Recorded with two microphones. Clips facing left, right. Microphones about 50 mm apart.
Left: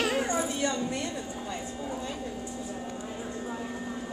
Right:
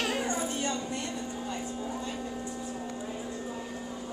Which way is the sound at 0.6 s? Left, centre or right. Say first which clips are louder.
Left 3 dB; left.